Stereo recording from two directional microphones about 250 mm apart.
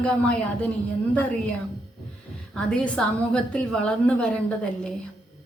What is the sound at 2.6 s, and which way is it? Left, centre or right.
A woman's voice, centre.